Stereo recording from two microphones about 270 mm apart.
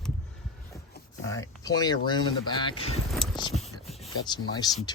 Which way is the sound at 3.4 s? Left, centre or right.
Centre.